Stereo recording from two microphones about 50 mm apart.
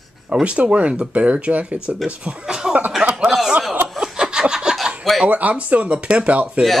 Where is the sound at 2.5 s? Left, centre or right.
Centre.